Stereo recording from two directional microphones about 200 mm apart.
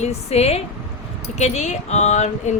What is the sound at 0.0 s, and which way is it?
A woman's voice, 30° left (ahead or behind).